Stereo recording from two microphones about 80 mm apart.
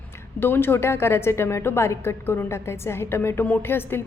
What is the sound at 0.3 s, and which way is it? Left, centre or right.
A woman's voice, left.